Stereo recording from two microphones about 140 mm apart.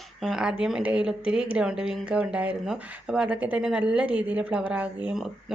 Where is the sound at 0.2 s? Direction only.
Centre (ahead or behind).